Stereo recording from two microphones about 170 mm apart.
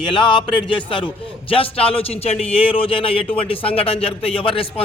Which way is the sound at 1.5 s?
35° left (ahead or behind).